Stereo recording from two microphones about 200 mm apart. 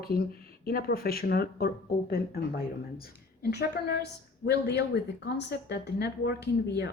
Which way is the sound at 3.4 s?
55° left (ahead or behind).